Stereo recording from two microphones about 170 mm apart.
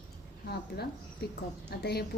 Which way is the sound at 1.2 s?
75° left (ahead or behind).